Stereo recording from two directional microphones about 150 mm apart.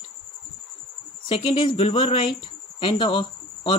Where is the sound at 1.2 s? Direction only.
40° left (ahead or behind).